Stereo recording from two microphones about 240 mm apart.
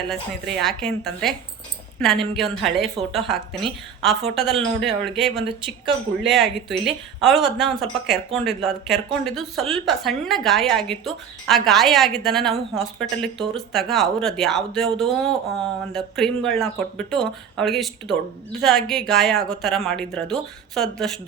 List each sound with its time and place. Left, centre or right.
0.1 s speech: centre
5.5 s speech: right
6.2 s speech: centre